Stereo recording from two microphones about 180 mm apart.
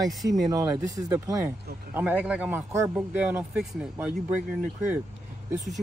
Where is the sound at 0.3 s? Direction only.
20° right (ahead or behind).